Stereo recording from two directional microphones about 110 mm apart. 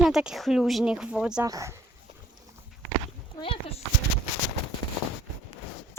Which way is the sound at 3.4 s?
55° left (ahead or behind).